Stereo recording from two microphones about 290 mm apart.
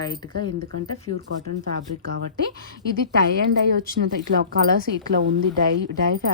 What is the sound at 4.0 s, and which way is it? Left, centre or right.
Speech, right.